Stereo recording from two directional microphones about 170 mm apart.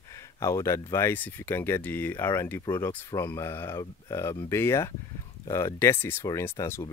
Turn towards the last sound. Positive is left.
turn(degrees=15)  # may be behind; listen again after turning